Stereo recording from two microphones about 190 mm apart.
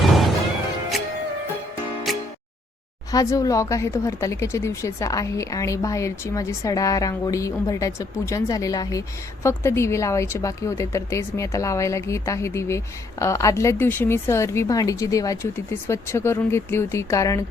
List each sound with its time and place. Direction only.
0.0 s music: centre (ahead or behind)
2.1 s music: centre (ahead or behind)
3.1 s speech: 20° left (ahead or behind)